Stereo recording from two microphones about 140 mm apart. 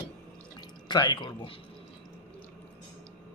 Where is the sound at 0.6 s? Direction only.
30° left (ahead or behind).